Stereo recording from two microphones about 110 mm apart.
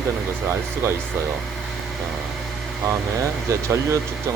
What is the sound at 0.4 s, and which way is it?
Speech, 25° right (ahead or behind).